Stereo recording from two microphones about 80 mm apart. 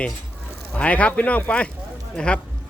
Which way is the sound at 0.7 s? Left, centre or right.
Centre.